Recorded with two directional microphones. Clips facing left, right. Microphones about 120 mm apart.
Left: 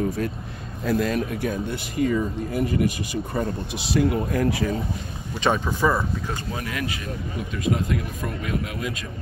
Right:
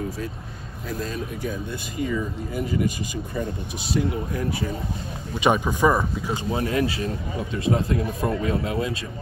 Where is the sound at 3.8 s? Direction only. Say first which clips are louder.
Left 3 dB; 90° left.